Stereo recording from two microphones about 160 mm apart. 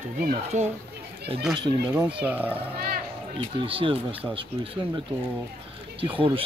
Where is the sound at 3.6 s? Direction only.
35° right (ahead or behind).